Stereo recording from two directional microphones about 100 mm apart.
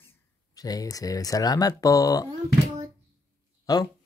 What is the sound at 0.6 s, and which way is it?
Speech, 40° left (ahead or behind).